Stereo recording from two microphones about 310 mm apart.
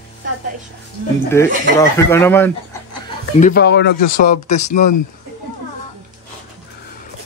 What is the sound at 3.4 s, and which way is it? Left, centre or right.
Speech, left.